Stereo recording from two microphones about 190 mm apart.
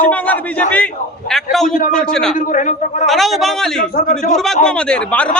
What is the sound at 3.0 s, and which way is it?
A man's voice, centre (ahead or behind).